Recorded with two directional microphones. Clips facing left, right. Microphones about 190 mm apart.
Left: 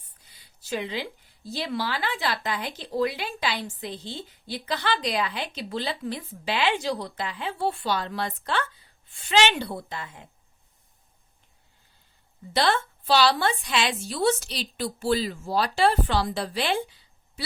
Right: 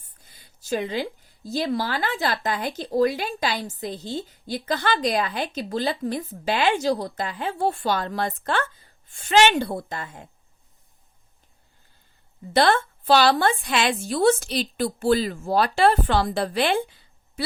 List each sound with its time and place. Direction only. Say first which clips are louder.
0.2 s a sound: right 7 dB; 45° right (ahead or behind)
1.5 s a woman's voice: right 4 dB; 45° right (ahead or behind)
12.5 s a woman's voice: right 5 dB; 50° right (ahead or behind)